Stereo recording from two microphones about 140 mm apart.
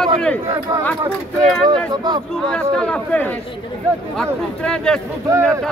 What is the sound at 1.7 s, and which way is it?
Speech, 30° right (ahead or behind).